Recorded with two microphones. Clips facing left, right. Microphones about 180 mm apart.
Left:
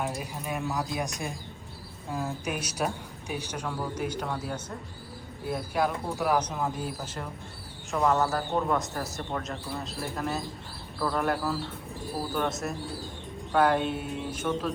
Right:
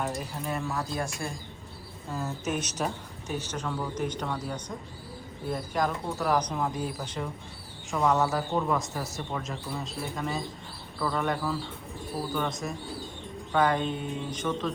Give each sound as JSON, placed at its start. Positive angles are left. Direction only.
{"t": 0.0, "sound": "speech", "side_deg": 0}
{"t": 0.7, "sound": "speech", "side_deg": 15}